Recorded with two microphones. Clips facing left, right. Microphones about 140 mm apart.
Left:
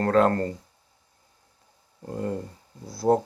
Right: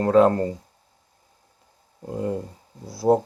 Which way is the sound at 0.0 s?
10° right (ahead or behind).